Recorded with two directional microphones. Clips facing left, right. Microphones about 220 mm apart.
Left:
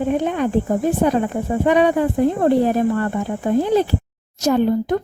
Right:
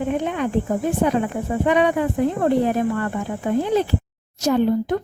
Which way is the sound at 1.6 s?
35° left (ahead or behind).